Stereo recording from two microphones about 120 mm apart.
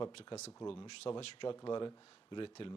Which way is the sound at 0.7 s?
50° left (ahead or behind).